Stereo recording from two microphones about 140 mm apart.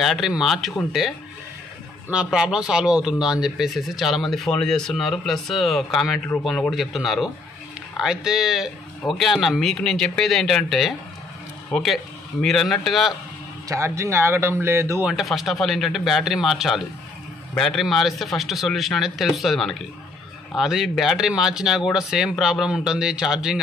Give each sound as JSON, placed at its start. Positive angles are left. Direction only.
{"t": 0.0, "sound": "speech", "side_deg": 0}
{"t": 13.7, "sound": "speech", "side_deg": -20}
{"t": 15.0, "sound": "speech", "side_deg": 0}